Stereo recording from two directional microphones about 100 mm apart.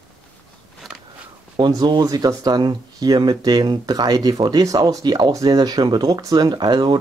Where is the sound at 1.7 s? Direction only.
45° right (ahead or behind).